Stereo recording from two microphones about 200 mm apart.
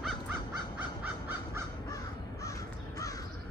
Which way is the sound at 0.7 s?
10° right (ahead or behind).